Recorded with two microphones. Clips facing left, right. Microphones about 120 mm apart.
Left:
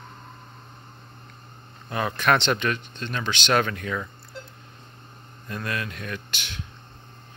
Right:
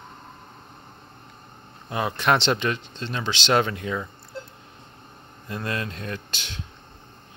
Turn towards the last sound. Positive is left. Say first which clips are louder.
# right 1 dB
turn(degrees=-30)  # may be behind; listen again after turning